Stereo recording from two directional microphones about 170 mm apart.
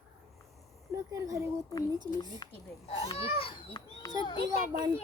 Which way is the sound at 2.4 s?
25° left (ahead or behind).